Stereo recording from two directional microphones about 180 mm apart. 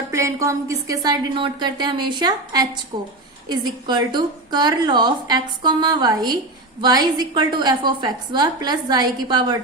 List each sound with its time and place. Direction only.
0.1 s a woman's voice: 15° right (ahead or behind)